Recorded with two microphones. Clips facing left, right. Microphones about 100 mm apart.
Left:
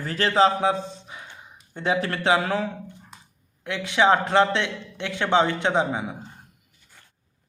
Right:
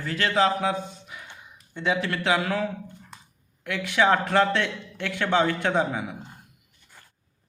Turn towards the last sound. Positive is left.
turn(degrees=25)  # may be behind; listen again after turning